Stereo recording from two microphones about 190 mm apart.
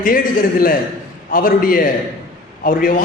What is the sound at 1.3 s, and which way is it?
A man's voice, 50° left (ahead or behind).